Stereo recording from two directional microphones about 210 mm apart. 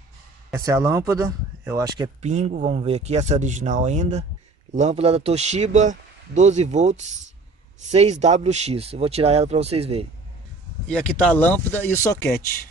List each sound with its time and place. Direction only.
0.5 s speech: 15° right (ahead or behind)
2.2 s speech: 35° right (ahead or behind)
10.9 s speech: 5° left (ahead or behind)